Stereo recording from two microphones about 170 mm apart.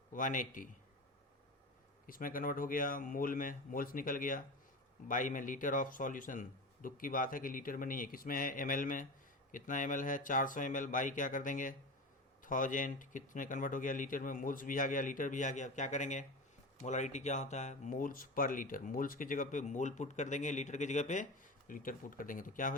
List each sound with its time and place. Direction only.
0.1 s speech: 50° left (ahead or behind)
2.0 s speech: 55° left (ahead or behind)